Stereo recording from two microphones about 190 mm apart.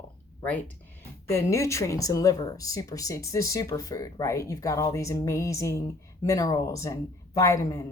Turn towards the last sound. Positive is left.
turn(degrees=15)  # may be behind; listen again after turning